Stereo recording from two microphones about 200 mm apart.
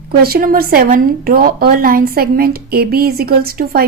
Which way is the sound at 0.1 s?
50° right (ahead or behind).